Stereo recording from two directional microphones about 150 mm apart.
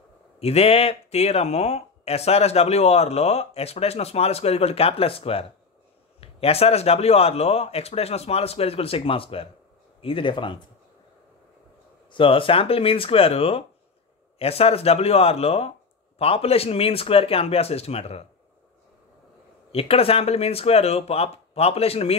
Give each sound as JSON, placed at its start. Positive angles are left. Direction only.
{"t": 0.4, "sound": "speech", "side_deg": 40}
{"t": 12.1, "sound": "speech", "side_deg": 35}
{"t": 19.7, "sound": "speech", "side_deg": 40}